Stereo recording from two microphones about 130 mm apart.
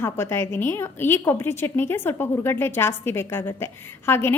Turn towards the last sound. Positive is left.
turn(degrees=20)  # may be behind; listen again after turning